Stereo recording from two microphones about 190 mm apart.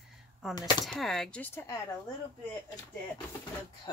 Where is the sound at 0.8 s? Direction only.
Centre (ahead or behind).